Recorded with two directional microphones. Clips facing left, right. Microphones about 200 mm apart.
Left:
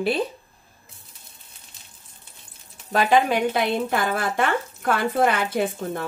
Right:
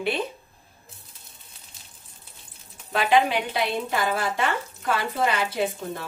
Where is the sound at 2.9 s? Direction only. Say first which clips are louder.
Left 2 dB; 45° left (ahead or behind).